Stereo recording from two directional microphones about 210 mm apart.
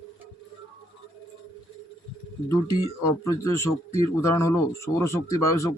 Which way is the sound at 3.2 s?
15° left (ahead or behind).